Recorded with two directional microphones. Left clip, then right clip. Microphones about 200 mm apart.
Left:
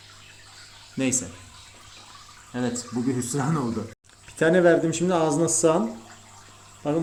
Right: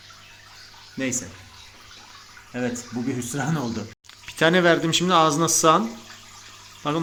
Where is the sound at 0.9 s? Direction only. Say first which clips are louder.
Left 1 dB; 15° left (ahead or behind).